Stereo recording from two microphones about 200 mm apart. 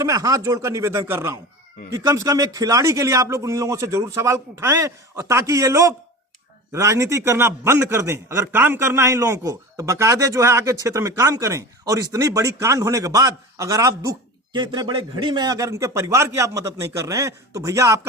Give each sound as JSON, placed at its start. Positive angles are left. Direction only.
{"t": 0.0, "sound": "a man's voice", "side_deg": -15}